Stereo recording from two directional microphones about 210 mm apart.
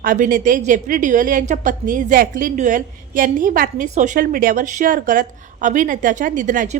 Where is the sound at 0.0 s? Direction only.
40° right (ahead or behind).